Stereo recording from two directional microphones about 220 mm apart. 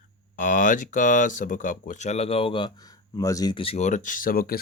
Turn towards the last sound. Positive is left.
turn(degrees=40)  # may be behind; listen again after turning